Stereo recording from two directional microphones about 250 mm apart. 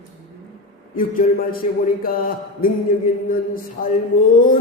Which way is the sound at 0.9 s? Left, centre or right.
Left.